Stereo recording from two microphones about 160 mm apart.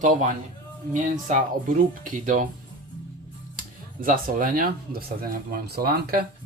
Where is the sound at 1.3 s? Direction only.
50° right (ahead or behind).